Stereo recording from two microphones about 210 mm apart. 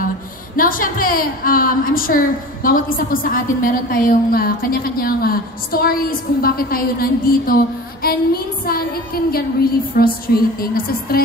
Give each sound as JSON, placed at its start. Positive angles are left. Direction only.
{"t": 0.6, "sound": "a woman's voice", "side_deg": 40}